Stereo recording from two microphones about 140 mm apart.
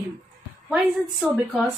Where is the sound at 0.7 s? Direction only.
Centre (ahead or behind).